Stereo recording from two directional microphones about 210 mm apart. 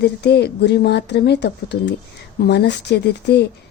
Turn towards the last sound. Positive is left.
turn(degrees=55)  # may be behind; listen again after turning